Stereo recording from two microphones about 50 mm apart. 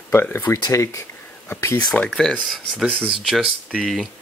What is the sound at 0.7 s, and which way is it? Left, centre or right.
Speech, left.